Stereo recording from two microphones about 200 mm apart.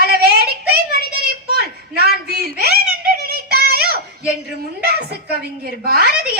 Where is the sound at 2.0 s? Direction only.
50° right (ahead or behind).